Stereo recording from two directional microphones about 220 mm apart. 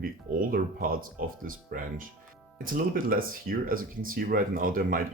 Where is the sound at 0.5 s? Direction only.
40° right (ahead or behind).